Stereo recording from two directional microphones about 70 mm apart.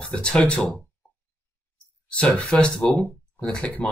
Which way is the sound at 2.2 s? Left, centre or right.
Centre.